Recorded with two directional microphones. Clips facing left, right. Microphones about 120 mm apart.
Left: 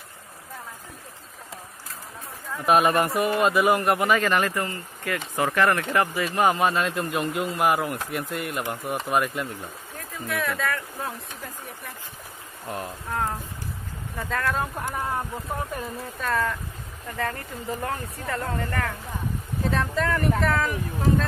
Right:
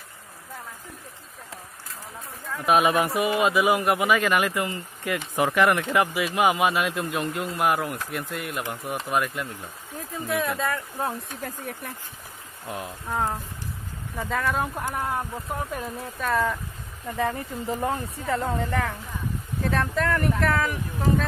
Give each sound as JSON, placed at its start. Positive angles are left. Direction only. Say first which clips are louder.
{"t": 2.5, "sound": "speech", "louder": "left 1 dB", "side_deg": 0}
{"t": 10.4, "sound": "speech", "louder": "right 1 dB", "side_deg": -20}
{"t": 12.6, "sound": "speech", "louder": "left 1 dB", "side_deg": -5}
{"t": 19.7, "sound": "speech", "louder": "right 1 dB", "side_deg": 0}